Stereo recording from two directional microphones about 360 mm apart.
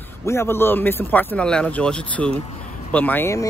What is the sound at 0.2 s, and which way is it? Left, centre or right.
Speech, centre.